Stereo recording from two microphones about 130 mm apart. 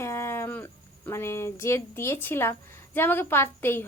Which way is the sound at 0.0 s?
20° left (ahead or behind).